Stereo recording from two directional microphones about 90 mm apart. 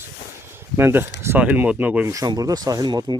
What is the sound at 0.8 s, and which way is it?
Speech, 25° right (ahead or behind).